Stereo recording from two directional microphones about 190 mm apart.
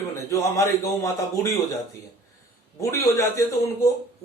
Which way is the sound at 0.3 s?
15° left (ahead or behind).